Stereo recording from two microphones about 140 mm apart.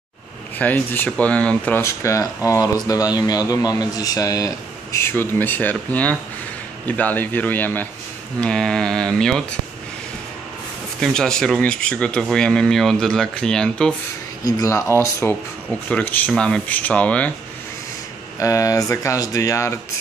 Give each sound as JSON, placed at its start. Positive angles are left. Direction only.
{"t": 0.6, "sound": "speech", "side_deg": 10}
{"t": 1.8, "sound": "speech", "side_deg": 20}
{"t": 11.0, "sound": "speech", "side_deg": 5}
{"t": 14.4, "sound": "speech", "side_deg": 20}
{"t": 18.4, "sound": "speech", "side_deg": 25}